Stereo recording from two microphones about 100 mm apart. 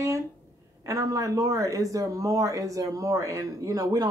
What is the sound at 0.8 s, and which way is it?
Speech, 35° right (ahead or behind).